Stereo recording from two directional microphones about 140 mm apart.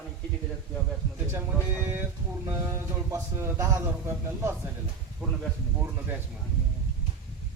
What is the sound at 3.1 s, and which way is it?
A man's voice, 20° right (ahead or behind).